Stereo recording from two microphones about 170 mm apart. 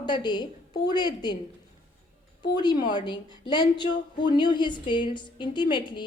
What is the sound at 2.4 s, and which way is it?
A woman's voice, 25° left (ahead or behind).